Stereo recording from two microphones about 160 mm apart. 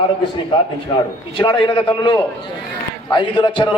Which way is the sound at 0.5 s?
30° left (ahead or behind).